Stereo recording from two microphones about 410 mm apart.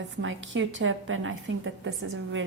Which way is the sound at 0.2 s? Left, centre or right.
Right.